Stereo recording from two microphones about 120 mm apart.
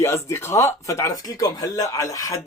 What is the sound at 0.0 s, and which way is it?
Speech, 25° left (ahead or behind).